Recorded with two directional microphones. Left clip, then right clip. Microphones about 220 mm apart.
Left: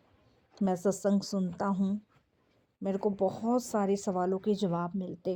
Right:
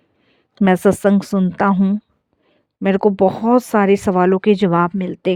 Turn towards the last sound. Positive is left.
turn(degrees=-75)  # may be behind; listen again after turning